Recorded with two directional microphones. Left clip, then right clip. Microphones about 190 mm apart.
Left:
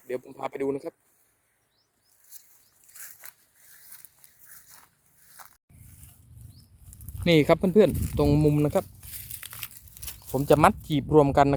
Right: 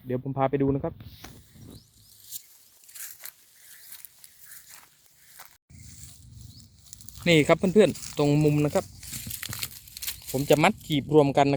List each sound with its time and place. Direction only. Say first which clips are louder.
0.1 s speech: right 7 dB; 25° left (ahead or behind)
2.9 s a sound: right 3 dB; 5° left (ahead or behind)
4.5 s zipper: right 3 dB; centre (ahead or behind)
5.4 s a sound: even; centre (ahead or behind)
7.3 s speech: even; 10° left (ahead or behind)
9.0 s crumpling: right 6 dB; 10° right (ahead or behind)
10.6 s speech: left 2 dB; 55° left (ahead or behind)
11.0 s speech: left 1 dB; 5° left (ahead or behind)